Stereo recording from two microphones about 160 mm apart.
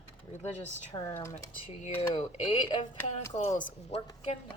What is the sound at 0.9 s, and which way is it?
Speech, 25° left (ahead or behind).